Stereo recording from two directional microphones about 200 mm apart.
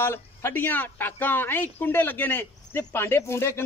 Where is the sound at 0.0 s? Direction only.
10° left (ahead or behind).